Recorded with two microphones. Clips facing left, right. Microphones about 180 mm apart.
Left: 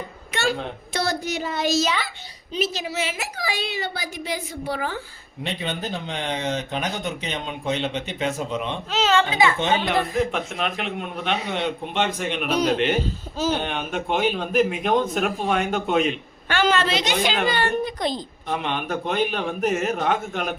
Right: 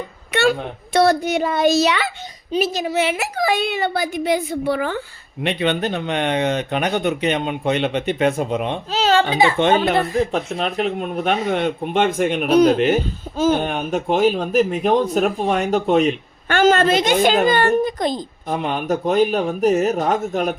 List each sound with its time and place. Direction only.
0.3 s a sound: 65° right (ahead or behind)
0.9 s speech: 60° right (ahead or behind)
2.5 s speech: 55° right (ahead or behind)
5.4 s speech: 70° right (ahead or behind); by 8.8 s 55° right (ahead or behind)
8.9 s speech: 35° right (ahead or behind)
9.6 s speech: 60° right (ahead or behind)
10.3 s speech: 35° right (ahead or behind)